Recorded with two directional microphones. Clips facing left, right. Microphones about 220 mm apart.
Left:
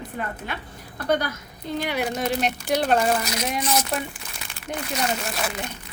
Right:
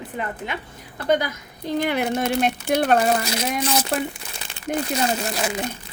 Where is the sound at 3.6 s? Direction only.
30° right (ahead or behind).